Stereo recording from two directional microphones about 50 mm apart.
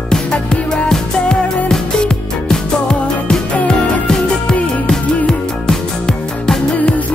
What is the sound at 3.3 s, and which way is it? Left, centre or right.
Music, centre.